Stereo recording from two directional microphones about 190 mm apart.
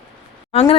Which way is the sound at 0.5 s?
30° left (ahead or behind).